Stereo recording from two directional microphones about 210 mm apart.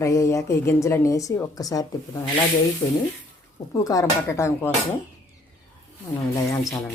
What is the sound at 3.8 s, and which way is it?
Speech, 15° left (ahead or behind).